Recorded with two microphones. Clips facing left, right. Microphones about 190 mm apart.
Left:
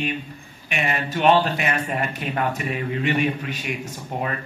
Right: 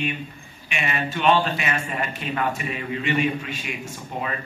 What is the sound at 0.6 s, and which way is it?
Speech, 50° left (ahead or behind).